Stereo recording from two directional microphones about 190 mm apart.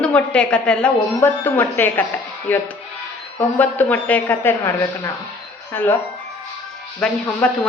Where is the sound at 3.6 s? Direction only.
10° left (ahead or behind).